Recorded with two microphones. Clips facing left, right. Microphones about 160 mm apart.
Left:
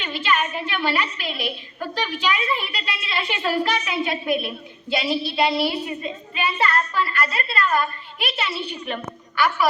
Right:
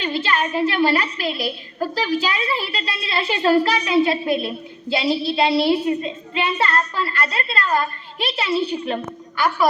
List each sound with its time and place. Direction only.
0.0 s a woman's voice: 35° right (ahead or behind)